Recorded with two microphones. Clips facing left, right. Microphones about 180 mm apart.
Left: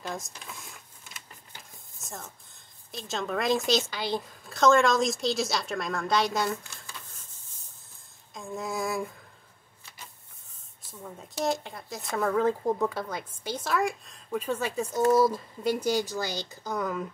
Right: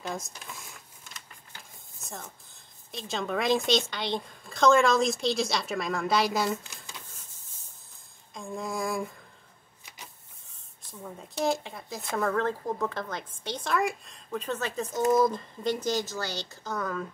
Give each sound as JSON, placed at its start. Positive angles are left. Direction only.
{"t": 0.0, "sound": "speech", "side_deg": 0}
{"t": 2.0, "sound": "a sound", "side_deg": 0}
{"t": 2.9, "sound": "speech", "side_deg": 0}
{"t": 6.6, "sound": "speech", "side_deg": -20}
{"t": 8.4, "sound": "speech", "side_deg": 0}
{"t": 10.9, "sound": "speech", "side_deg": 0}